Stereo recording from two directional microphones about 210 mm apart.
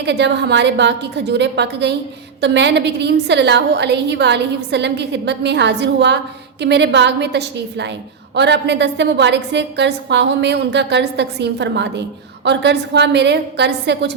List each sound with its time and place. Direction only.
0.0 s a woman's voice: 55° right (ahead or behind)